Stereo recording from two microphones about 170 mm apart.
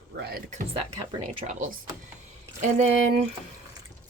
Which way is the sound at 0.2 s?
65° right (ahead or behind).